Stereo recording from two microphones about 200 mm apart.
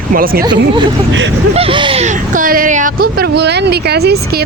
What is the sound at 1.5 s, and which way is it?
Speech, 25° right (ahead or behind).